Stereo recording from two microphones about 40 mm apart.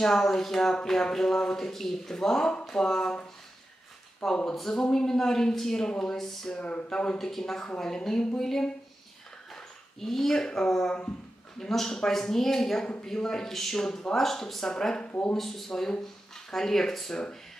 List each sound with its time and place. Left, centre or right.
0.0 s speech: centre
4.2 s speech: centre; by 7.2 s left
7.2 s speech: centre